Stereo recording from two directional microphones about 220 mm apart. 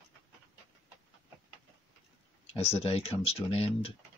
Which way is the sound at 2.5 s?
25° left (ahead or behind).